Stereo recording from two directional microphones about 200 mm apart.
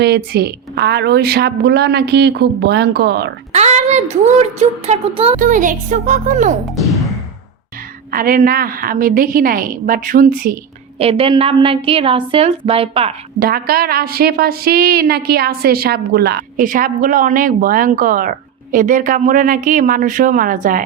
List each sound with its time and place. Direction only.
0.0 s a woman's voice: 55° right (ahead or behind)
3.5 s speech: 35° right (ahead or behind)
5.4 s speech: 40° right (ahead or behind)
6.8 s music: centre (ahead or behind)
8.1 s a woman's voice: 45° right (ahead or behind)
10.9 s a woman's voice: 30° right (ahead or behind)
13.4 s a woman's voice: 50° right (ahead or behind)